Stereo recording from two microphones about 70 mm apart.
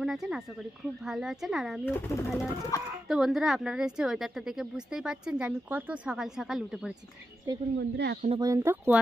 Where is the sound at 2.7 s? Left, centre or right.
Left.